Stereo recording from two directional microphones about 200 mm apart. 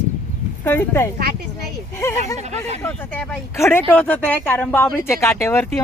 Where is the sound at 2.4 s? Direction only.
35° right (ahead or behind).